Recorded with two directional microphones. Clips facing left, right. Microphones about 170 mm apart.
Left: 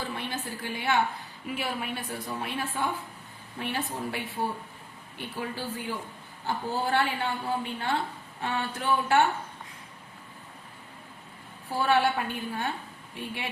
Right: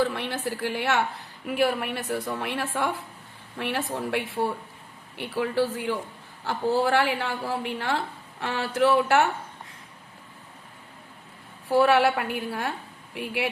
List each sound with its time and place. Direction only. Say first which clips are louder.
0.1 s a woman's voice: right 5 dB; 80° right
6.4 s a woman's voice: right 6 dB; 90° right
11.7 s a woman's voice: right 5 dB; 90° right